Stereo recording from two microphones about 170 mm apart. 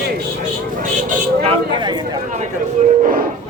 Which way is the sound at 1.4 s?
35° right (ahead or behind).